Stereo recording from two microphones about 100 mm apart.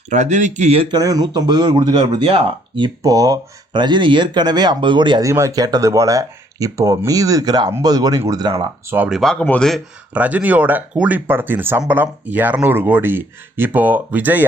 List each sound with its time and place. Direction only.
0.9 s speech: 40° right (ahead or behind); by 2.9 s 55° right (ahead or behind)
3.0 s speech: 35° right (ahead or behind)
5.2 s speech: 30° right (ahead or behind)
8.5 s speech: 25° right (ahead or behind)
9.4 s speech: 15° left (ahead or behind)
10.2 s speech: 15° right (ahead or behind)